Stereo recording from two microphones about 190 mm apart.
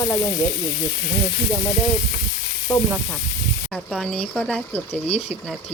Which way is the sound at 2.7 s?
15° left (ahead or behind).